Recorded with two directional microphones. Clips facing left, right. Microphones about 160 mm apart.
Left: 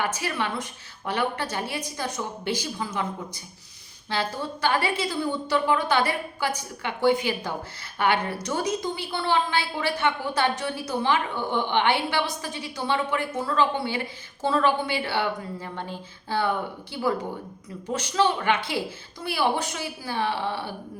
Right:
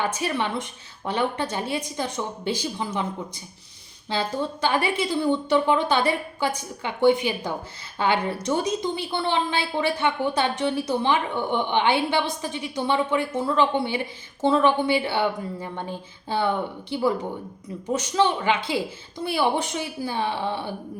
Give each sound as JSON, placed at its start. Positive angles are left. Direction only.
{"t": 0.0, "sound": "a woman's voice", "side_deg": -20}